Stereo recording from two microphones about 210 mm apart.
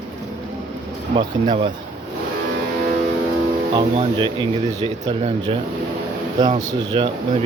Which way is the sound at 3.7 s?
20° right (ahead or behind).